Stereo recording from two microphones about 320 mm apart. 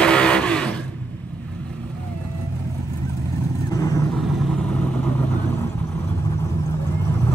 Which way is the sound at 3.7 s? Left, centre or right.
Centre.